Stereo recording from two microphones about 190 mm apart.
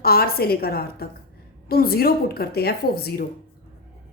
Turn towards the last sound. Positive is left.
turn(degrees=55)  # may be behind; listen again after turning